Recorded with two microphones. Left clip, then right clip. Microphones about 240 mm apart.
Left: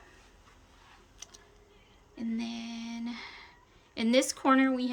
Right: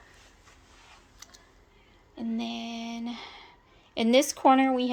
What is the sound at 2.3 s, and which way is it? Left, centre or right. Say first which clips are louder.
Speech: right 6 dB; centre.